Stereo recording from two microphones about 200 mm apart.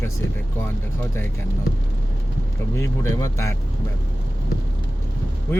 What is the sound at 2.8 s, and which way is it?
Speech, 15° left (ahead or behind).